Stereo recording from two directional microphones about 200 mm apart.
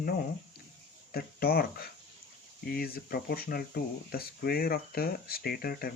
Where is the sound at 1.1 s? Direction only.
50° left (ahead or behind).